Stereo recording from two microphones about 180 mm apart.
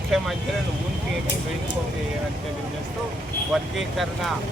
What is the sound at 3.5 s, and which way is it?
Speech, centre (ahead or behind).